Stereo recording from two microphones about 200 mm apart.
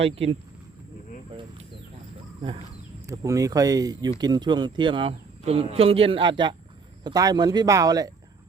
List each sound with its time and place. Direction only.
0.0 s speech: 30° right (ahead or behind)
3.1 s speech: 15° right (ahead or behind)